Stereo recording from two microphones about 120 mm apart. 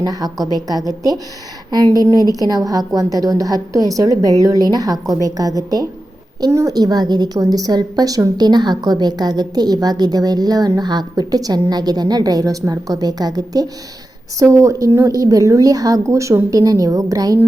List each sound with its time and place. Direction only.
0.0 s a woman's voice: 30° right (ahead or behind)